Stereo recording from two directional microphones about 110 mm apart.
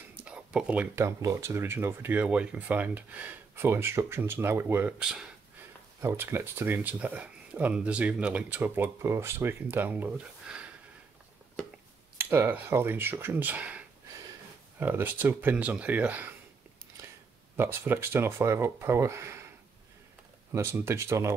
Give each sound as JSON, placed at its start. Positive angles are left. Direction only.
{"t": 0.1, "sound": "speech", "side_deg": -10}
{"t": 5.9, "sound": "speech", "side_deg": -20}
{"t": 12.2, "sound": "speech", "side_deg": -20}
{"t": 17.6, "sound": "speech", "side_deg": -20}
{"t": 20.5, "sound": "speech", "side_deg": -25}